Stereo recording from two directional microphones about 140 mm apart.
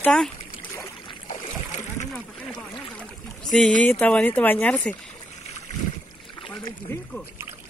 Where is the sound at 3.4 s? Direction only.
5° left (ahead or behind).